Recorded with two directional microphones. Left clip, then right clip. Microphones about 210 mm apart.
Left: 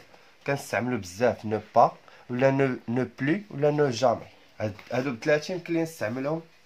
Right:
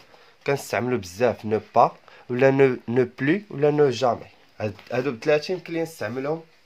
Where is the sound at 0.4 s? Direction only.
35° right (ahead or behind).